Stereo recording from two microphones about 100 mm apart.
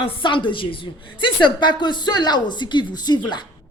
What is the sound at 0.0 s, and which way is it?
A woman's voice, 55° left (ahead or behind).